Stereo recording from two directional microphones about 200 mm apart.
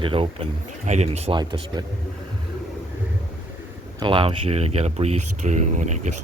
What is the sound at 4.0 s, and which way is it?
Speech, 25° right (ahead or behind).